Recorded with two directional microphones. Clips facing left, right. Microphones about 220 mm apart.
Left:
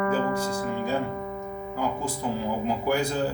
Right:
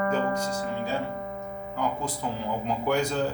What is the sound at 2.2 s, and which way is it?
Speech, 5° left (ahead or behind).